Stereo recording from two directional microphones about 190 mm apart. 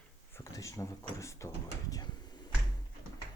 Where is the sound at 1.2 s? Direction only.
15° left (ahead or behind).